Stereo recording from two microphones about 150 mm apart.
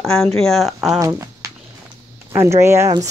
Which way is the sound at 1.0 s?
20° right (ahead or behind).